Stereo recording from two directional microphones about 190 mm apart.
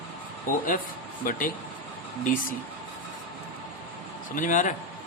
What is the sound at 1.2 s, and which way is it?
Speech, 45° left (ahead or behind).